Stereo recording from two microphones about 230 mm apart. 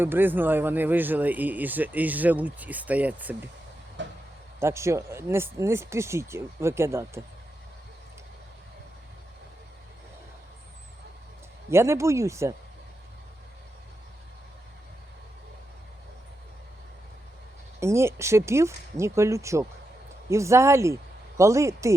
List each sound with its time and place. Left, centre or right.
0.0 s speech: centre
4.0 s a sound: right
4.6 s speech: centre
11.7 s speech: centre
17.7 s speech: centre